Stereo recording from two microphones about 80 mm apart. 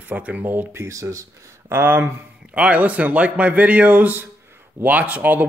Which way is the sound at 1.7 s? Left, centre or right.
Right.